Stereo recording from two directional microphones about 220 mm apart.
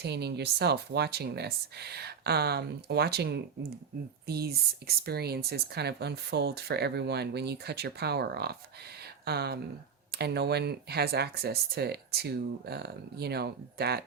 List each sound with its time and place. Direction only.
0.0 s speech: 50° right (ahead or behind)